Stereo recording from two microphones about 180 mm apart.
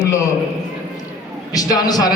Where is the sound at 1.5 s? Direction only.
20° left (ahead or behind).